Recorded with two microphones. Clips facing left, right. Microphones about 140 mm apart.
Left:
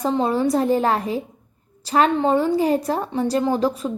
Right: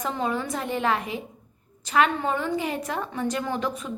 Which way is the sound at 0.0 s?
35° left (ahead or behind).